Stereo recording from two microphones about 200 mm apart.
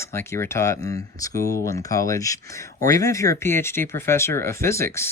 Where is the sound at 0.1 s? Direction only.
15° left (ahead or behind).